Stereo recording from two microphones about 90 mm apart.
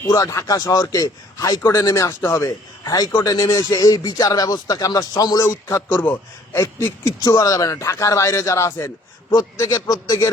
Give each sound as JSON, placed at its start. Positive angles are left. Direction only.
{"t": 0.1, "sound": "a man's voice", "side_deg": 40}
{"t": 5.9, "sound": "a man's voice", "side_deg": 20}
{"t": 6.6, "sound": "speech", "side_deg": 30}
{"t": 7.2, "sound": "a man's voice", "side_deg": 45}